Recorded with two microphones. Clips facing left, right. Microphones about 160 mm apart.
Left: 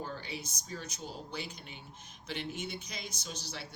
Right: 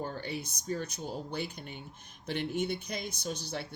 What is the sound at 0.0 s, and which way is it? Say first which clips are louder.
Speech: right 4 dB; 55° right (ahead or behind).